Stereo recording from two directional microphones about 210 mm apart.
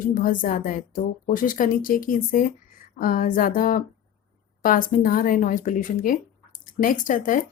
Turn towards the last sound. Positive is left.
turn(degrees=40)  # may be behind; listen again after turning